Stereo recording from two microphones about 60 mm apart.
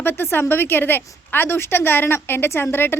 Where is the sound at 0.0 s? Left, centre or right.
Left.